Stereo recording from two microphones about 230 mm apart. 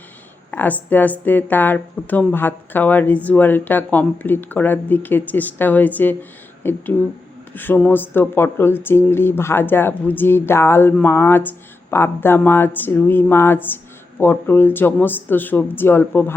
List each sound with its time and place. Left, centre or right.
0.5 s speech: centre